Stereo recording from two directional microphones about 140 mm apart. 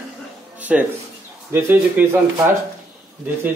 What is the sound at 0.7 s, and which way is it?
Speech, 5° right (ahead or behind).